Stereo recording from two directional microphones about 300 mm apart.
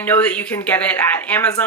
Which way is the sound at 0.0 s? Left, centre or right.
Centre.